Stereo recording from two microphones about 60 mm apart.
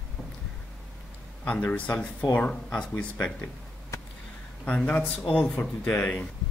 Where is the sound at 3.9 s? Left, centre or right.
Left.